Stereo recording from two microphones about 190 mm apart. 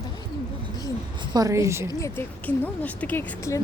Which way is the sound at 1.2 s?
20° right (ahead or behind).